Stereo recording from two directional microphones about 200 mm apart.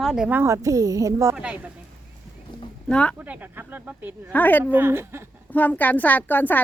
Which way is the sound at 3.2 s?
10° right (ahead or behind).